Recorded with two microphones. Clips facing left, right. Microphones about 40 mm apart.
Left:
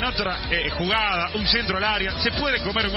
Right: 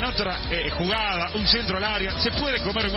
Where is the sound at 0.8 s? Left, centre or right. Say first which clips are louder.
Left 4 dB; centre.